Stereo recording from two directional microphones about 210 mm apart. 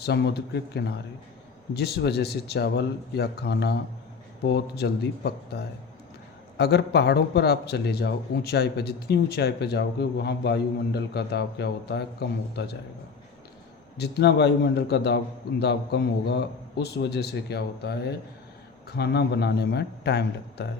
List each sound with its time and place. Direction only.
0.0 s a man's voice: 50° left (ahead or behind)
13.9 s a man's voice: 50° left (ahead or behind)